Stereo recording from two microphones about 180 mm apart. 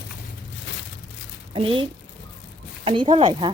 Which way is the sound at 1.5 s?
30° right (ahead or behind).